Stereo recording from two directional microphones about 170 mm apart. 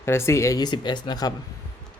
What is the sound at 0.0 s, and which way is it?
Speech, 15° left (ahead or behind).